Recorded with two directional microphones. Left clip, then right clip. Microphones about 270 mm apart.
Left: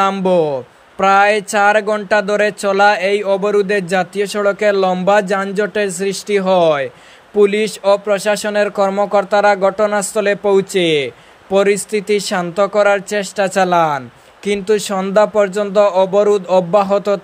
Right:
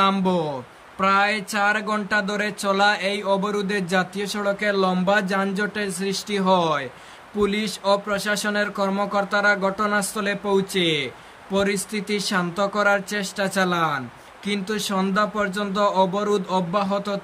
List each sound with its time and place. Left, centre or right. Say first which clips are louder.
0.0 s speech: left 7 dB; centre